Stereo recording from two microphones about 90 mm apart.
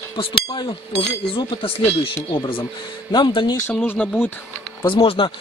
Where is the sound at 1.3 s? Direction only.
85° left.